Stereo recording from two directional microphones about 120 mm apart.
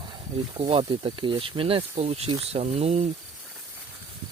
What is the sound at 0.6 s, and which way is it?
Speech, 45° right (ahead or behind).